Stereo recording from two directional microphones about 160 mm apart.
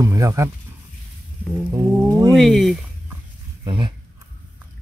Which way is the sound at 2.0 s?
20° right (ahead or behind).